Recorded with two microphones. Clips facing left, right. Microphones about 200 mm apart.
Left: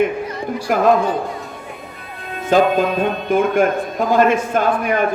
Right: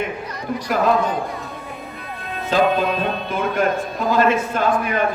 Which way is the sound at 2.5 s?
50° left (ahead or behind).